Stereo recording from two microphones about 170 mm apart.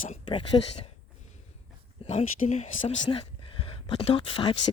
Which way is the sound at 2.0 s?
40° left (ahead or behind).